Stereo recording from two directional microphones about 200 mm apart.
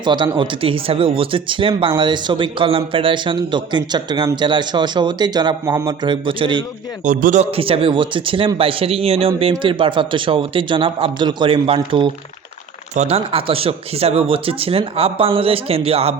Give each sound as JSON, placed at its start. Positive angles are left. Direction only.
{"t": 0.0, "sound": "speech", "side_deg": -20}
{"t": 7.0, "sound": "speech", "side_deg": -40}